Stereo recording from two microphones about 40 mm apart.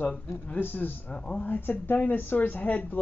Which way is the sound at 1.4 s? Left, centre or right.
Left.